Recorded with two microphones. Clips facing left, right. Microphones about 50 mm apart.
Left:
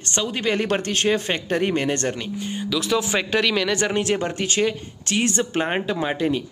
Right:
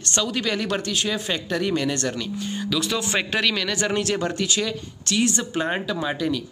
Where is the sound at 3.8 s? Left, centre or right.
Left.